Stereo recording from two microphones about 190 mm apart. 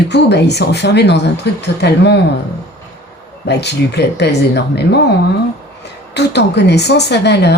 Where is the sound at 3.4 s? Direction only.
60° left (ahead or behind).